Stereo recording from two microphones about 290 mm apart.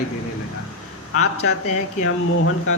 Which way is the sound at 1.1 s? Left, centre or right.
Left.